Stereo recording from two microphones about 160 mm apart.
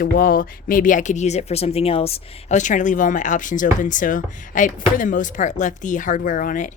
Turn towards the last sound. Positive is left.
turn(degrees=55)  # may be behind; listen again after turning